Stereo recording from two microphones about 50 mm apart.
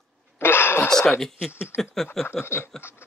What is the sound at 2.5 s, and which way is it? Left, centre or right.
Speech, left.